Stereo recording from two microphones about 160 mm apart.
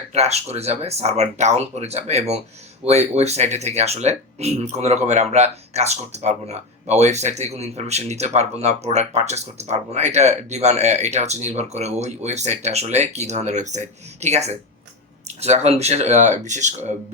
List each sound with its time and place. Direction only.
0.1 s speech: 40° right (ahead or behind)